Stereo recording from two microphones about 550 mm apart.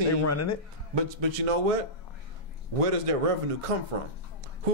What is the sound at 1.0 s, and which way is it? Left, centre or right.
Speech, right.